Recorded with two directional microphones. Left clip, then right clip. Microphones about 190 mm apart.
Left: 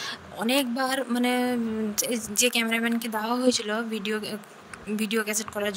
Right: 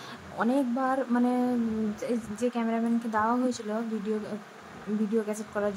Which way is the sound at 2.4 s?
65° left (ahead or behind).